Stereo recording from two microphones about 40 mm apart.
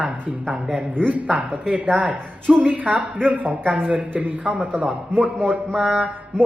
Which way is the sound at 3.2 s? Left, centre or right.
Right.